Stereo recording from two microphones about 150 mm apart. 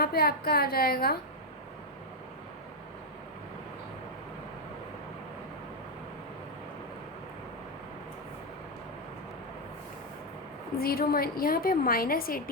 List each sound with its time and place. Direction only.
0.0 s a woman's voice: 90° left
10.8 s a woman's voice: 80° left